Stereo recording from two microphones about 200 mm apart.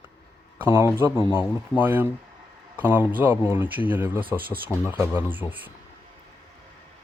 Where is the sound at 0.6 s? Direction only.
10° right (ahead or behind).